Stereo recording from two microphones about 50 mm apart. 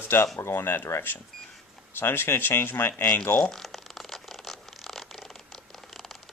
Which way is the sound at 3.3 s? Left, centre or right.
Centre.